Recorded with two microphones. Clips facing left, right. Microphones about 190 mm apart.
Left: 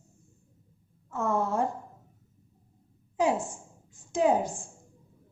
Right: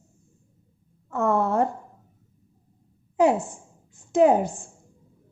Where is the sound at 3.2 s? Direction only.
65° right (ahead or behind).